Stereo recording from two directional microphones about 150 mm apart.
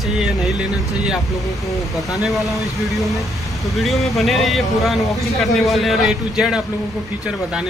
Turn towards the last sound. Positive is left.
turn(degrees=-5)  # may be behind; listen again after turning